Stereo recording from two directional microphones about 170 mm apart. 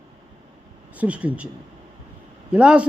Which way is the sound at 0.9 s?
5° right (ahead or behind).